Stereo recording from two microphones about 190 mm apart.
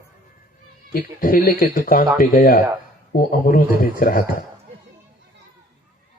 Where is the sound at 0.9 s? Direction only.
50° left (ahead or behind).